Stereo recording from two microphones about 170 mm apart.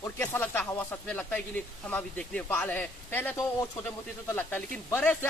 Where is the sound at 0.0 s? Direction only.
10° left (ahead or behind).